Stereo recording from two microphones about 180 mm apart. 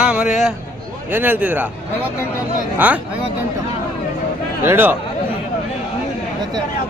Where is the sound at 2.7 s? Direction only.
10° right (ahead or behind).